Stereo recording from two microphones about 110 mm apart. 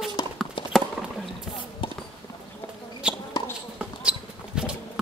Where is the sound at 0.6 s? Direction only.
50° left (ahead or behind).